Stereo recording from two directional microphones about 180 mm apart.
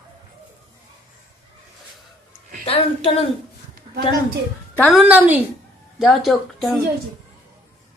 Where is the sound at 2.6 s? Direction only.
30° left (ahead or behind).